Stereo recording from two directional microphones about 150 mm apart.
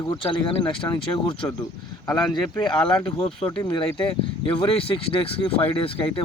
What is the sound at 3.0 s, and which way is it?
Speech, 40° left (ahead or behind).